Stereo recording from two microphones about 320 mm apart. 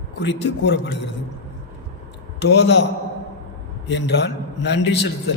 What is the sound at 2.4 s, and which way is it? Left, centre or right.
Speech, left.